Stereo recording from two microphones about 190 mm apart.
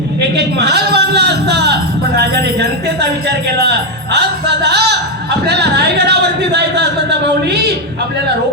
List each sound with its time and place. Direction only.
0.3 s a man's voice: 60° right (ahead or behind)
4.1 s a man's voice: 60° right (ahead or behind)